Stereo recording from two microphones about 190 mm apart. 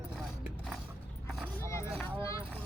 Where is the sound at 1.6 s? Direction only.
15° left (ahead or behind).